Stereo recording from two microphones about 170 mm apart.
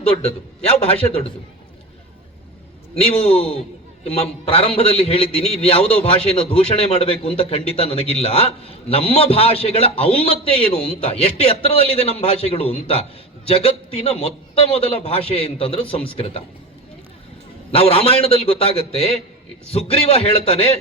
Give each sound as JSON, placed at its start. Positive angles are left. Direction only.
{"t": 0.0, "sound": "a man's voice", "side_deg": 35}
{"t": 2.9, "sound": "a man's voice", "side_deg": 35}
{"t": 17.7, "sound": "a man's voice", "side_deg": 35}